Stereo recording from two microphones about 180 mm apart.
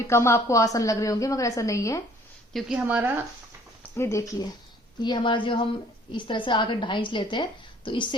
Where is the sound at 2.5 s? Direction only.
5° right (ahead or behind).